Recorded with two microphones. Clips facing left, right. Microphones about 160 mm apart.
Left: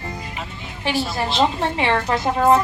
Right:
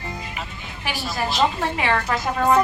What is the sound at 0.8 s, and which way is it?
A woman's voice, 25° left (ahead or behind).